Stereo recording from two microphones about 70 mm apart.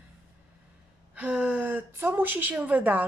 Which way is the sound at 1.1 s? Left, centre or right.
Centre.